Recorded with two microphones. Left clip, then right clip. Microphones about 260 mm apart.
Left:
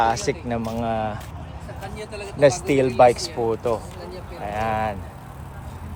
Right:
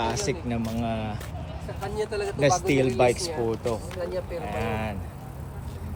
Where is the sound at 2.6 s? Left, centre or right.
Left.